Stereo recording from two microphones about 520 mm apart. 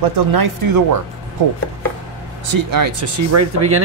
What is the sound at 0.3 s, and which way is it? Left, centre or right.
Speech, right.